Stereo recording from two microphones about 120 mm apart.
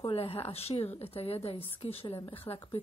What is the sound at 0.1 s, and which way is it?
A woman's voice, 55° left (ahead or behind).